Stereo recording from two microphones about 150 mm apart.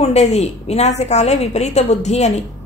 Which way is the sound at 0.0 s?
50° left (ahead or behind).